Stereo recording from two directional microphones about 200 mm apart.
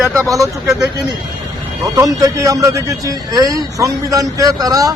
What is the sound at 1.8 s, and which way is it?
Speech, 15° right (ahead or behind).